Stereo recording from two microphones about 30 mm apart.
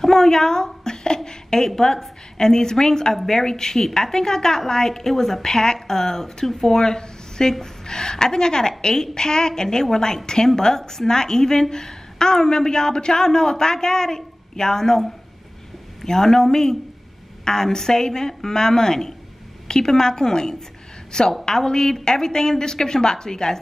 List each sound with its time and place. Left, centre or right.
0.0 s speech: centre
0.8 s a sound: left
1.8 s a woman's voice: centre